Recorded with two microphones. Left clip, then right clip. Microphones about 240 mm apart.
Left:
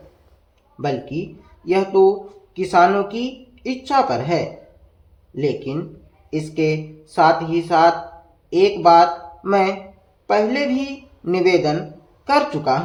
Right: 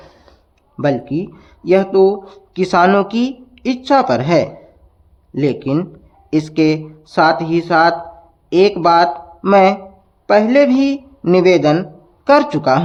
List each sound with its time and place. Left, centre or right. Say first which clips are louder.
1.6 s speech: right 3 dB; right